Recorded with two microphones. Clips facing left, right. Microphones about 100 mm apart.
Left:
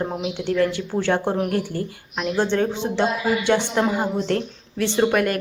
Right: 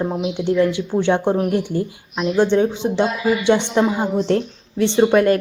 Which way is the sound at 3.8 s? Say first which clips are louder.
Right 2 dB; centre (ahead or behind).